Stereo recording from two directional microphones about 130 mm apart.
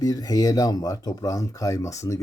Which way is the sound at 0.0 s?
30° left (ahead or behind).